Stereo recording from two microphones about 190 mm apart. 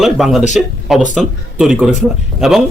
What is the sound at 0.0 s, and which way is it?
A man's voice, centre (ahead or behind).